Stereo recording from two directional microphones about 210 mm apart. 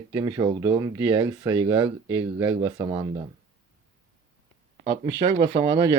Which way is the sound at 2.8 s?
20° right (ahead or behind).